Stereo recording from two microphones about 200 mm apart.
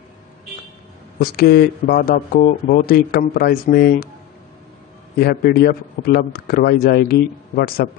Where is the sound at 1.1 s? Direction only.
50° left (ahead or behind).